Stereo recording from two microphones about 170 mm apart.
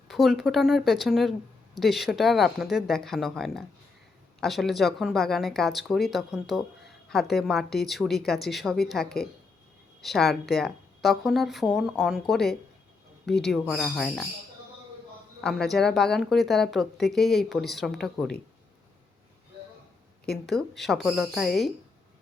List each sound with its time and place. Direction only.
0.1 s speech: centre (ahead or behind)
15.4 s speech: centre (ahead or behind)
20.5 s speech: centre (ahead or behind)